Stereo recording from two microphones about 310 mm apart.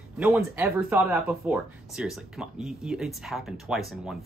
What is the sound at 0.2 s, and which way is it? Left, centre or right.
Speech, centre.